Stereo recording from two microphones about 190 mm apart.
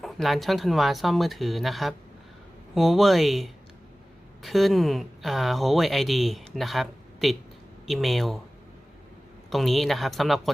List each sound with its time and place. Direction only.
0.0 s speech: centre (ahead or behind)
9.5 s speech: centre (ahead or behind)